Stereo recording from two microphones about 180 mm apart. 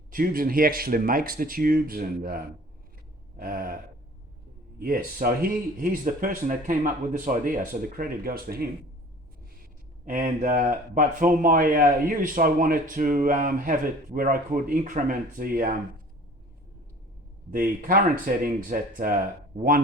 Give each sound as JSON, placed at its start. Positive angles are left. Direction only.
{"t": 0.1, "sound": "speech", "side_deg": -55}
{"t": 3.3, "sound": "a sound", "side_deg": -55}
{"t": 4.8, "sound": "speech", "side_deg": -55}
{"t": 10.1, "sound": "speech", "side_deg": -50}
{"t": 17.5, "sound": "speech", "side_deg": -50}